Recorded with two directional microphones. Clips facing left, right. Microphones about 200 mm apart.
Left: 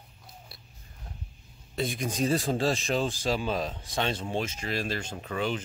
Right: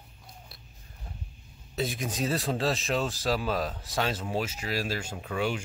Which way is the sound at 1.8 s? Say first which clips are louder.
Left 2 dB; 5° right (ahead or behind).